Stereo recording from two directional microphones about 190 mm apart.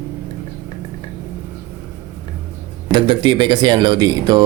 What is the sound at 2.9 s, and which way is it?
Speech, 25° right (ahead or behind).